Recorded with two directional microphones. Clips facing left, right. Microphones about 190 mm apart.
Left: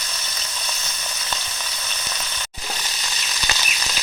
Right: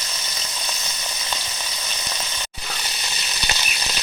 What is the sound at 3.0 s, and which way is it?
Frying, 20° right (ahead or behind).